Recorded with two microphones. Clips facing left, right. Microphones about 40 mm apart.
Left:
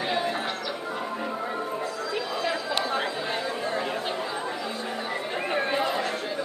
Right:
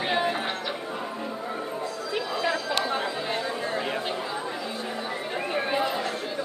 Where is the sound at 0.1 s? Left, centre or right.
Centre.